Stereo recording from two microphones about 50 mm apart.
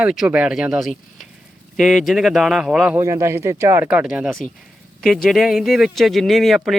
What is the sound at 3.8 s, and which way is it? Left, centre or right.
Speech, right.